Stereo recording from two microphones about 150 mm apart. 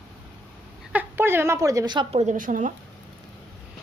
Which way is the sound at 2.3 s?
60° right (ahead or behind).